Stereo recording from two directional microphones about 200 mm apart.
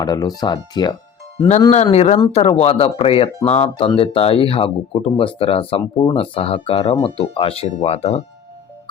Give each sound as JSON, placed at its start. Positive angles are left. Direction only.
{"t": 0.0, "sound": "speech", "side_deg": 20}
{"t": 1.7, "sound": "speech", "side_deg": 35}